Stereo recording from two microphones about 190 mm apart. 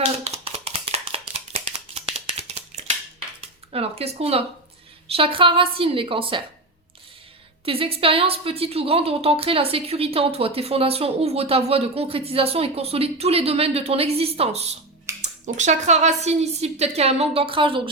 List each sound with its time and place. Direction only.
0.3 s a sound: 35° right (ahead or behind)
3.7 s a woman's voice: 30° right (ahead or behind)
7.6 s a woman's voice: 30° right (ahead or behind)